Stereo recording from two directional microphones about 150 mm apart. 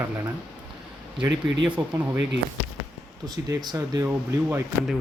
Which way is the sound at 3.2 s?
25° right (ahead or behind).